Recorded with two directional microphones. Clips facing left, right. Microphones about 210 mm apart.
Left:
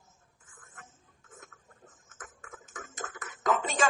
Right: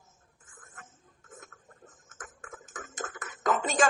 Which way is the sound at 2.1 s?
50° right (ahead or behind).